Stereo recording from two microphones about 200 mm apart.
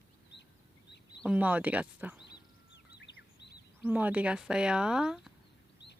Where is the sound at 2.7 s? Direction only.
55° left (ahead or behind).